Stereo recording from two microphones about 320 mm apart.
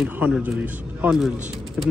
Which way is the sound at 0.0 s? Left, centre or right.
Centre.